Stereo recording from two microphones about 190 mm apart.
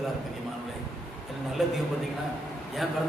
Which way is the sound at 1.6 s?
Centre (ahead or behind).